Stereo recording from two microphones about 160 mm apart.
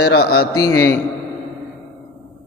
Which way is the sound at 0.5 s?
20° left (ahead or behind).